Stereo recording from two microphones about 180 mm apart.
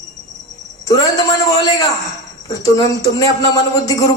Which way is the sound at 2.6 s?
20° left (ahead or behind).